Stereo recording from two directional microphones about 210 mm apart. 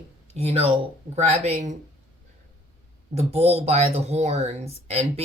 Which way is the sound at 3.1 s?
30° right (ahead or behind).